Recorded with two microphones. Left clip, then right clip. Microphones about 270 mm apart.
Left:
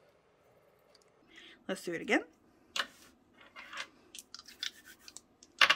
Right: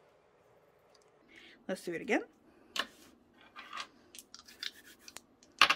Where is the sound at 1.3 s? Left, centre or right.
Centre.